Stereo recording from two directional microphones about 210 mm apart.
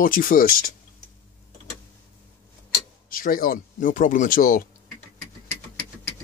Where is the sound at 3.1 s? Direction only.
40° left (ahead or behind).